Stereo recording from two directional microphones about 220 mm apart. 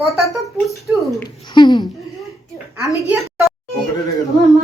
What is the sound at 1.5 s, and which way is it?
Speech, 20° left (ahead or behind).